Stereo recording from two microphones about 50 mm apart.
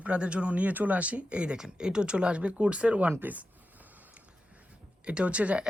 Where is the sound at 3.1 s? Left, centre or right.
Right.